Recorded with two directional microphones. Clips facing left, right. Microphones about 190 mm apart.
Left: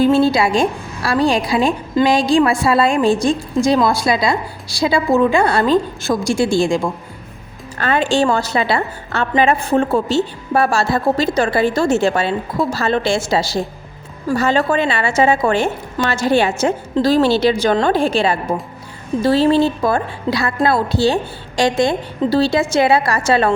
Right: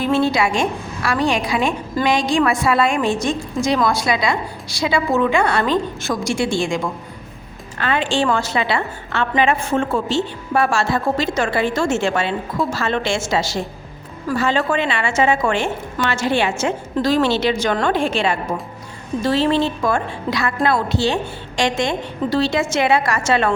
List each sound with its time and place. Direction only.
0.0 s a woman's voice: 30° left (ahead or behind)